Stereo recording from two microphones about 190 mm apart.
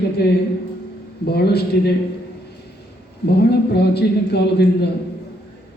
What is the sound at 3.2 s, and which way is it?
A man's voice, 60° left (ahead or behind).